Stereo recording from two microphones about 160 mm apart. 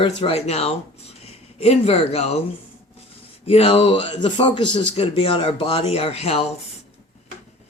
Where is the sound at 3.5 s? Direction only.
35° left (ahead or behind).